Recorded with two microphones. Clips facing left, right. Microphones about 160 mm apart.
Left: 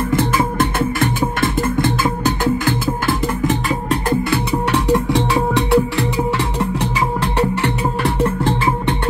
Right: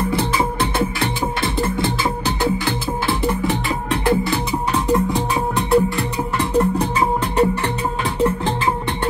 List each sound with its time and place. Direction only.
0.1 s music: 50° left (ahead or behind)
4.5 s music: 80° left